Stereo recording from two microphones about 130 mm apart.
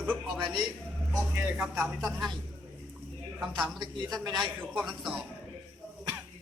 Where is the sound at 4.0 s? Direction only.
30° right (ahead or behind).